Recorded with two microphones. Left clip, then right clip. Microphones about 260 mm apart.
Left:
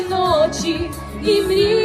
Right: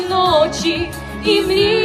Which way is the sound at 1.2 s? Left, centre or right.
Right.